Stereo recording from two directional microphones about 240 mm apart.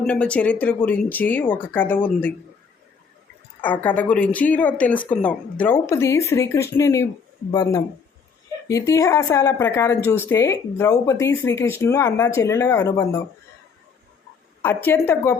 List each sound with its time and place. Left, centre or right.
0.0 s speech: centre
3.6 s speech: centre
14.6 s speech: centre